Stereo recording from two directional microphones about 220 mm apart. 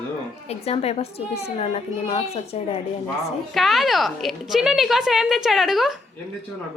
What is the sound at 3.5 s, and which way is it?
A woman's voice, centre (ahead or behind).